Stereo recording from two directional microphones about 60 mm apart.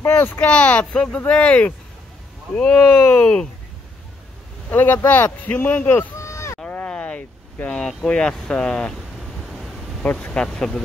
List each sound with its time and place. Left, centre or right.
0.2 s speech: left
0.9 s speech: centre
1.2 s speech: left
4.6 s speech: left
6.1 s a sound: left
6.7 s a sound: left
7.6 s speech: centre
9.4 s vehicle: centre
10.0 s speech: centre